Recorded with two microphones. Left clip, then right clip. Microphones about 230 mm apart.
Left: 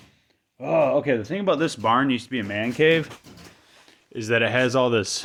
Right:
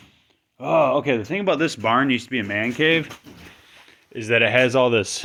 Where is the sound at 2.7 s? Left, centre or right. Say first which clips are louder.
Left 2 dB; left; by 5.2 s centre.